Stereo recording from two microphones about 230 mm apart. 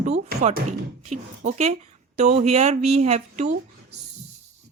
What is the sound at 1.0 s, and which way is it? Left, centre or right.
Speech, right.